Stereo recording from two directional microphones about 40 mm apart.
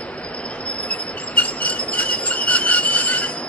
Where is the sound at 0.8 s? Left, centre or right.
Left.